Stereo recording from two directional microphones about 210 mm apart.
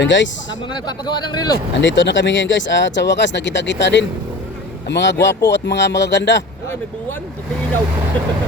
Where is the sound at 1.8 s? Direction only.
60° left (ahead or behind).